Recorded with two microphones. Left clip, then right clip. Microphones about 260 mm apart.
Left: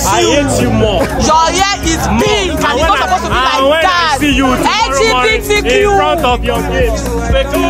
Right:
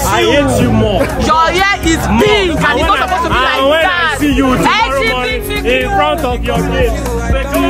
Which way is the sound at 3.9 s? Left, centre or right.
Left.